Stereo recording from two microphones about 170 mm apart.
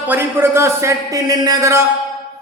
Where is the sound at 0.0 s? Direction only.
10° right (ahead or behind).